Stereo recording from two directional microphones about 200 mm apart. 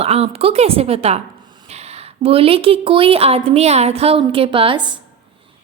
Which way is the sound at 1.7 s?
30° right (ahead or behind).